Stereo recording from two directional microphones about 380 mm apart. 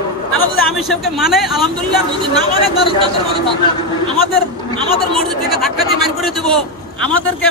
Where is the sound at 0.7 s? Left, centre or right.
Centre.